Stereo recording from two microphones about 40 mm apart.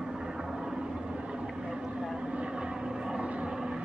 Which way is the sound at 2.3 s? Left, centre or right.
Right.